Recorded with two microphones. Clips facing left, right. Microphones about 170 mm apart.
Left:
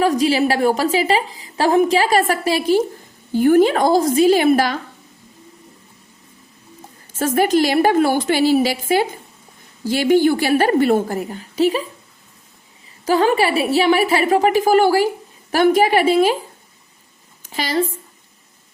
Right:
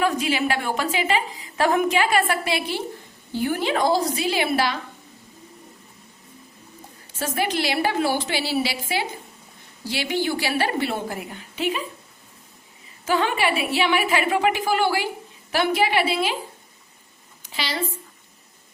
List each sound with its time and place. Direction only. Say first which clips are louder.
0.0 s a woman's voice: left 6 dB; 35° left (ahead or behind)
7.1 s a woman's voice: left 9 dB; 50° left (ahead or behind)
13.1 s a woman's voice: left 6 dB; 40° left (ahead or behind)
17.4 s a woman's voice: left 8 dB; 45° left (ahead or behind)